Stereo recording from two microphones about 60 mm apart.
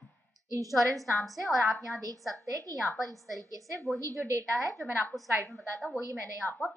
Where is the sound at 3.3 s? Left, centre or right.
Right.